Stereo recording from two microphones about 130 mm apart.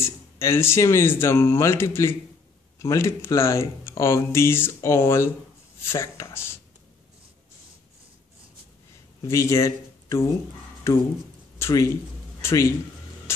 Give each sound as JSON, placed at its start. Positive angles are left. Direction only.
{"t": 0.0, "sound": "speech", "side_deg": 20}
{"t": 9.2, "sound": "a man's voice", "side_deg": 20}